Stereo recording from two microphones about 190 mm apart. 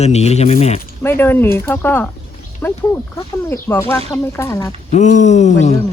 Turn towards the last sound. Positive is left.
turn(degrees=35)  # may be behind; listen again after turning